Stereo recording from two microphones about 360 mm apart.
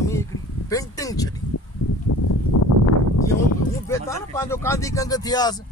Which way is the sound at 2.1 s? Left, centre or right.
Left.